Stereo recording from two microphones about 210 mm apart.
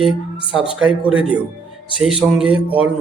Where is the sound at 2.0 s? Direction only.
Centre (ahead or behind).